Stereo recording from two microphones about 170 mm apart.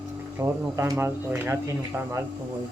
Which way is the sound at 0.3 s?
15° right (ahead or behind).